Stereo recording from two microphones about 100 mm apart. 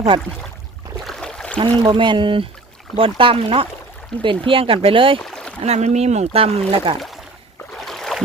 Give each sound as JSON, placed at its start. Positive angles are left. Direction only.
{"t": 1.0, "sound": "a sound", "side_deg": 5}
{"t": 1.5, "sound": "speech", "side_deg": -55}
{"t": 5.2, "sound": "rowboat", "side_deg": 10}
{"t": 5.6, "sound": "speech", "side_deg": -90}
{"t": 7.8, "sound": "boat", "side_deg": 0}